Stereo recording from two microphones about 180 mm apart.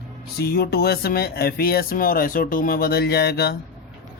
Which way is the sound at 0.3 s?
60° left (ahead or behind).